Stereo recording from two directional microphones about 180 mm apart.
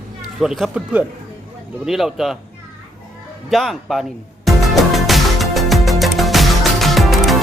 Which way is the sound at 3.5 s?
Centre (ahead or behind).